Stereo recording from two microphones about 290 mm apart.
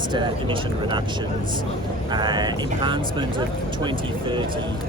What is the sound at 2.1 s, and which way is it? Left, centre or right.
Speech, centre.